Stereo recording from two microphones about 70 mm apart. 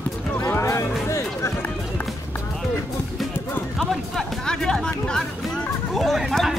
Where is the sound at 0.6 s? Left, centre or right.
Left.